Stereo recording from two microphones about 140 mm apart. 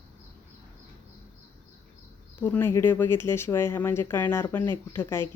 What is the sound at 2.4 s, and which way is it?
Speech, 15° left (ahead or behind).